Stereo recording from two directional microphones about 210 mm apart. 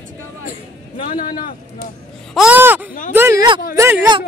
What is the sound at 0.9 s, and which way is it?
Speech, 40° left (ahead or behind).